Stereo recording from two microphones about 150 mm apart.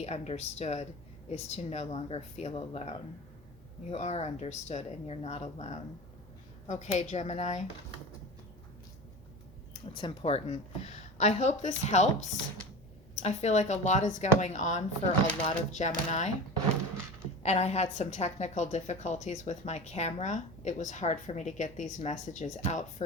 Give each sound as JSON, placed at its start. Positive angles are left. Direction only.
{"t": 0.0, "sound": "speech", "side_deg": 45}
{"t": 9.7, "sound": "speech", "side_deg": 35}
{"t": 17.4, "sound": "speech", "side_deg": 45}